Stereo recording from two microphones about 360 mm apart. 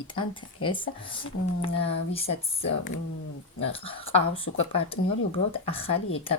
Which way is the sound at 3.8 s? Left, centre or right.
Centre.